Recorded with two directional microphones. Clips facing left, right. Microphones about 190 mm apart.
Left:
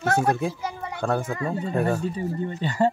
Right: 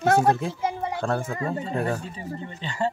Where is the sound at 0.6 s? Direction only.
25° right (ahead or behind).